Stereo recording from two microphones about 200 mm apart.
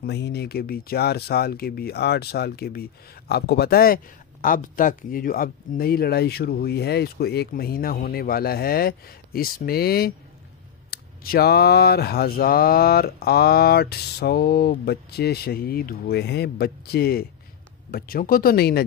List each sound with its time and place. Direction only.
0.0 s speech: 55° left (ahead or behind)